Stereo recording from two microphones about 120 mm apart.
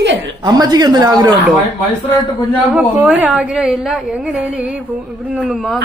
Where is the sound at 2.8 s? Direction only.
15° right (ahead or behind).